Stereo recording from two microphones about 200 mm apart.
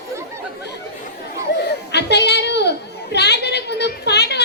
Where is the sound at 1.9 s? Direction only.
55° left (ahead or behind).